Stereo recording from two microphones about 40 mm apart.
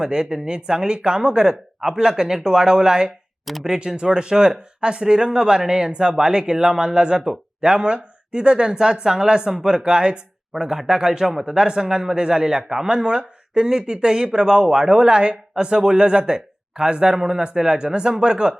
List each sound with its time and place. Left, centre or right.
0.0 s speech: centre